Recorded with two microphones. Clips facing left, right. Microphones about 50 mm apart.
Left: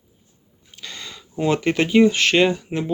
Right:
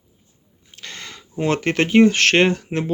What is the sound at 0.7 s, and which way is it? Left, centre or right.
Speech, right.